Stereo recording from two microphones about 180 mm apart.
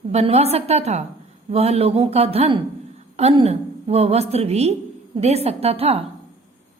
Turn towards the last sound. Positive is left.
turn(degrees=-35)  # may be behind; listen again after turning